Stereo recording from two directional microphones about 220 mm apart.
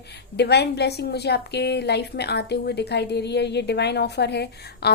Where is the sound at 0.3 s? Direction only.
50° left (ahead or behind).